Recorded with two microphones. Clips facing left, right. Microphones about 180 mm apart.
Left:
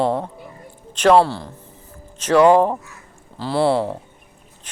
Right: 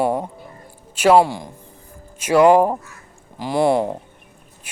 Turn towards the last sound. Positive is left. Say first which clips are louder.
# right 1 dB
turn(degrees=-15)  # may be behind; listen again after turning